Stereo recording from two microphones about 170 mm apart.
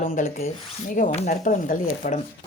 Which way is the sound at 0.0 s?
45° left (ahead or behind).